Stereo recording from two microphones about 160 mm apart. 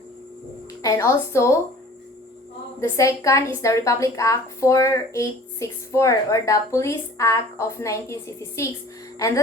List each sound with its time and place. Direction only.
0.8 s a woman's voice: 20° left (ahead or behind)
2.9 s a woman's voice: 20° left (ahead or behind)